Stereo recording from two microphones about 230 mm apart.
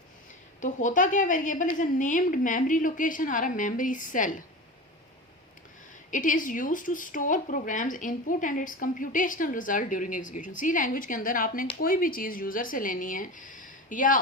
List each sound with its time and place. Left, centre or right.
0.6 s a woman's voice: left
6.1 s a woman's voice: left